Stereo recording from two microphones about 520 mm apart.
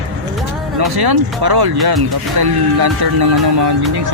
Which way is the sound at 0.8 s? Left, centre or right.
Right.